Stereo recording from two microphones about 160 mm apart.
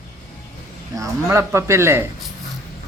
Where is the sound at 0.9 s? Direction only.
20° right (ahead or behind).